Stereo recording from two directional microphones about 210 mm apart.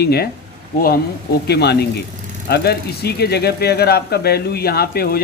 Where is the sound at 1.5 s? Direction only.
50° left (ahead or behind).